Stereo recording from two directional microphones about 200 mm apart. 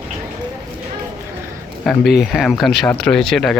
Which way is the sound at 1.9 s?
Centre (ahead or behind).